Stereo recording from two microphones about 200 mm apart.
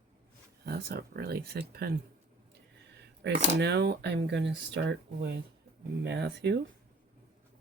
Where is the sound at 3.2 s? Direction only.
55° right (ahead or behind).